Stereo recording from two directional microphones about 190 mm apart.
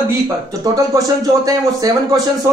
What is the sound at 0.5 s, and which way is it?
Speech, 15° right (ahead or behind).